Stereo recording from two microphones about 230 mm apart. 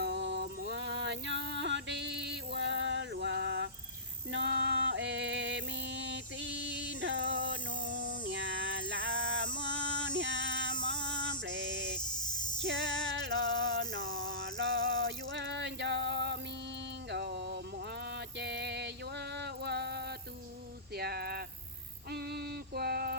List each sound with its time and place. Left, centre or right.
0.0 s music: right
18.0 s a sound: right
20.9 s cricket: right
22.1 s music: right